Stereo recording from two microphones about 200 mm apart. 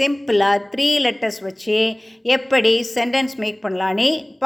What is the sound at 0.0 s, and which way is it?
A woman's voice, centre (ahead or behind).